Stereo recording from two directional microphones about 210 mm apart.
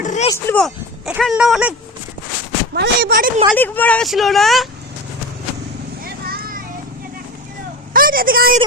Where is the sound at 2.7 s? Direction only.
45° right (ahead or behind).